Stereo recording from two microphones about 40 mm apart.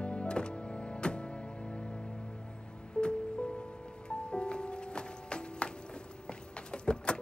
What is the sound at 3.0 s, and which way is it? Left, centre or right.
Music, left.